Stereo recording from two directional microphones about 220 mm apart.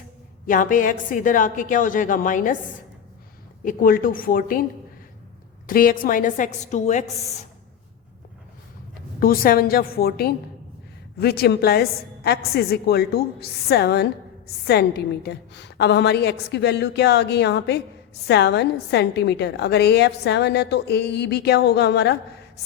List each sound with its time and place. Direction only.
0.4 s a woman's voice: 35° left (ahead or behind)
3.6 s a woman's voice: 40° left (ahead or behind)
5.6 s a woman's voice: 40° left (ahead or behind)
9.2 s a woman's voice: 40° left (ahead or behind)